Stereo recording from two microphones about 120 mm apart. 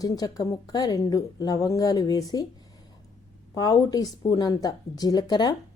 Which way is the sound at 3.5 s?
30° left (ahead or behind).